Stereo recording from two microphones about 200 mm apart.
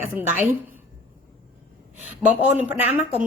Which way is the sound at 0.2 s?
10° right (ahead or behind).